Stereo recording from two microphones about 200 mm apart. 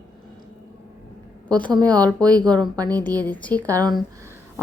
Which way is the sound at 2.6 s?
20° right (ahead or behind).